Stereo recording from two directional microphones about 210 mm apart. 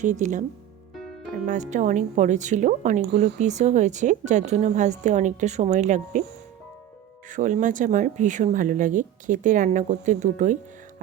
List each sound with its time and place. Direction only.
0.0 s speech: 35° right (ahead or behind)
1.5 s speech: 35° right (ahead or behind)
7.3 s speech: 35° right (ahead or behind)